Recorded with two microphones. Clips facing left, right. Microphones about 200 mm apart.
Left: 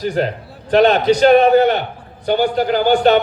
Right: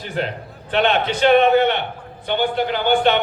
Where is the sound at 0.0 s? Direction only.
40° left (ahead or behind).